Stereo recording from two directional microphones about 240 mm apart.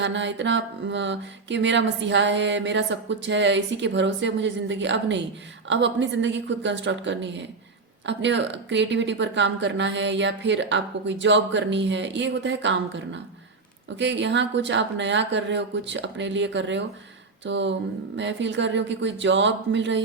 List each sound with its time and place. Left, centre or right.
0.0 s mantra: right
13.9 s mantra: right